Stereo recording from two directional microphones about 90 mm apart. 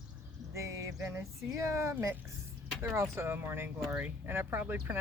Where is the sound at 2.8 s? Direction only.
30° right (ahead or behind).